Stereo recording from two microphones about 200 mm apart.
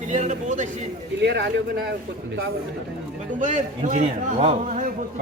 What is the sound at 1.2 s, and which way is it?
Speech, 60° right (ahead or behind).